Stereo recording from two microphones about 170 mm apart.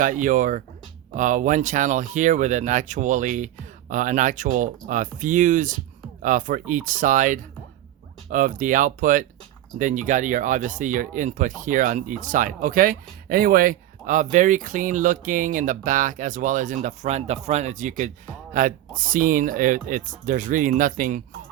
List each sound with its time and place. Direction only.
0.0 s speech: 50° right (ahead or behind)